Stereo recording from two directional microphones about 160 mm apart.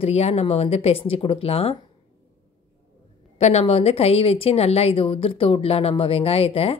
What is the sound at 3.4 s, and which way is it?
A woman's voice, 40° left (ahead or behind).